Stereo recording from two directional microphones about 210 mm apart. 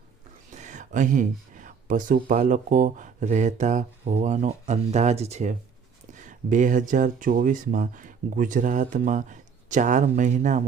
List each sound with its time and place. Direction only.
0.5 s speech: 35° right (ahead or behind)